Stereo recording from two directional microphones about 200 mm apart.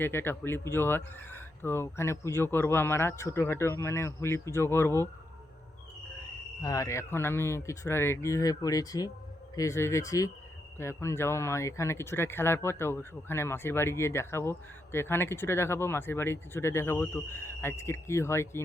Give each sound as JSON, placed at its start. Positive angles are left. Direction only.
{"t": 0.0, "sound": "speech", "side_deg": 10}
{"t": 6.6, "sound": "speech", "side_deg": 15}